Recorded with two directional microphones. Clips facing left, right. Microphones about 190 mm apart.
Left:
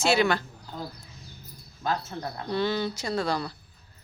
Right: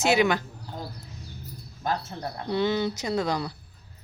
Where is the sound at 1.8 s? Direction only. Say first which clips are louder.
Even; 20° right (ahead or behind).